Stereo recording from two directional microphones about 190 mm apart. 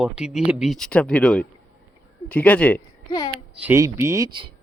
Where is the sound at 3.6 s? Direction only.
15° right (ahead or behind).